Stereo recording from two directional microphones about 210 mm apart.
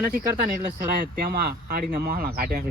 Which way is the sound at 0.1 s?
40° right (ahead or behind).